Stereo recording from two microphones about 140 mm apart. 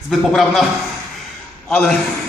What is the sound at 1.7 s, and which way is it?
Speech, 5° left (ahead or behind).